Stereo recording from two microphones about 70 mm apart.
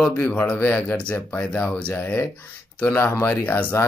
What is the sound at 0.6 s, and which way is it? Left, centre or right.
Speech, left.